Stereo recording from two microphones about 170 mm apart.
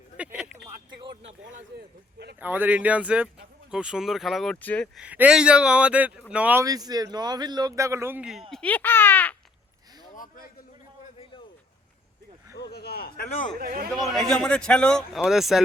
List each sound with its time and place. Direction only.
0.2 s a sound: 5° right (ahead or behind)
1.1 s speech: 40° right (ahead or behind)
2.4 s a man's voice: 10° right (ahead or behind); by 4.9 s 10° left (ahead or behind)
4.9 s speech: 10° right (ahead or behind)
6.7 s speech: 20° right (ahead or behind); by 9.3 s 10° left (ahead or behind)
10.1 s a sound: 55° left (ahead or behind)
12.7 s a man's voice: 70° left (ahead or behind)
13.6 s a man's voice: 60° right (ahead or behind)
13.9 s a man's voice: 5° left (ahead or behind)